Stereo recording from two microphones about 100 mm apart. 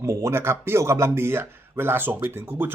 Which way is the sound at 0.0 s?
30° right (ahead or behind).